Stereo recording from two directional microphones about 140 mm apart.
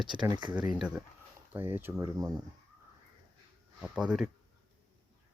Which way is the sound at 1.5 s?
15° right (ahead or behind).